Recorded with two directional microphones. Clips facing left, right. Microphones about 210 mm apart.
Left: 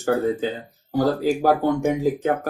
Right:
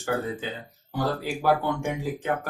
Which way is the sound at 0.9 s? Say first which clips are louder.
Left 8 dB; 40° left (ahead or behind).